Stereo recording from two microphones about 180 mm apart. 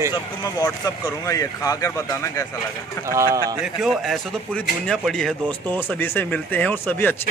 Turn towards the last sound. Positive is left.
turn(degrees=10)  # may be behind; listen again after turning